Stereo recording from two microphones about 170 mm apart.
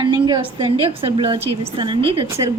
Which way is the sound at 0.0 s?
25° right (ahead or behind).